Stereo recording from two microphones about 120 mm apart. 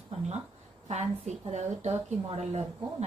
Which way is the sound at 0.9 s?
65° right (ahead or behind).